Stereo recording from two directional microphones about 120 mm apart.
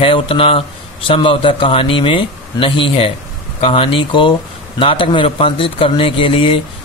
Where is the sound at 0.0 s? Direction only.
50° left (ahead or behind).